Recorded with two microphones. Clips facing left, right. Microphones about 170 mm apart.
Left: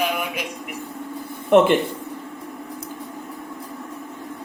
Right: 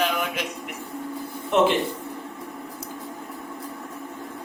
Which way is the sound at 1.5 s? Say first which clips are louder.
Left 5 dB; 55° left (ahead or behind).